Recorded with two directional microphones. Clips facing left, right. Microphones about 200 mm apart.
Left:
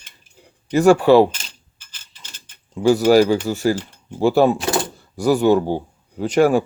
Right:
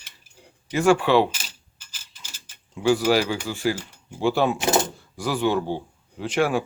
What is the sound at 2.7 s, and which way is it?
Speech, 40° left (ahead or behind).